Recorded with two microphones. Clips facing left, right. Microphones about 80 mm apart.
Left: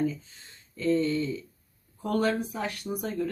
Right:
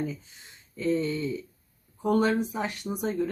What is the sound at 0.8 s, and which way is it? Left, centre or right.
Speech, centre.